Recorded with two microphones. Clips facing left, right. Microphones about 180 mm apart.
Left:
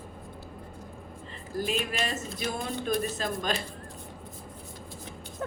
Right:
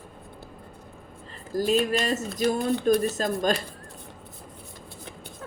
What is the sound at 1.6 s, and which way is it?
Speech, 40° right (ahead or behind).